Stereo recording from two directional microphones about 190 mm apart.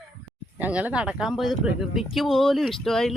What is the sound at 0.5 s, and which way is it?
Speech, 10° right (ahead or behind).